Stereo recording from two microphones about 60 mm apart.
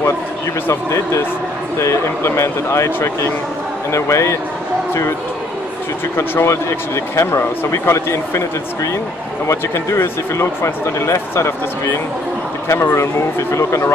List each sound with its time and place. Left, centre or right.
0.7 s speech: left
6.1 s speech: left
9.5 s speech: left